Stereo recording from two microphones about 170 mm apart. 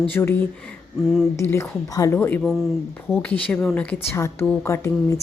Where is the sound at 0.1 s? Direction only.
15° left (ahead or behind).